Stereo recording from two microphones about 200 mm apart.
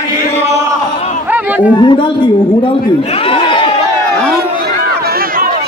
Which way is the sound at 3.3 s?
25° left (ahead or behind).